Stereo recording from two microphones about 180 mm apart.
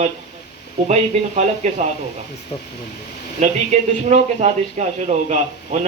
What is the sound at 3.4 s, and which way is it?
A man's voice, 40° right (ahead or behind).